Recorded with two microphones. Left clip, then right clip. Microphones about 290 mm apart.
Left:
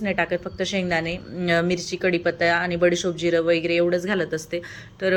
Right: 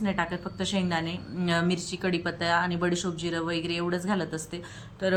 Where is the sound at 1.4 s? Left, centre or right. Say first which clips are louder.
Left 6 dB; centre.